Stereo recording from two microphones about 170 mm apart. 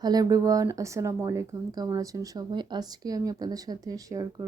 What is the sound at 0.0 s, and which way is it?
Speech, 20° right (ahead or behind).